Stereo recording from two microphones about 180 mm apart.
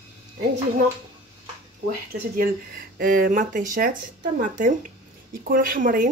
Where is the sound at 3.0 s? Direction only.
50° right (ahead or behind).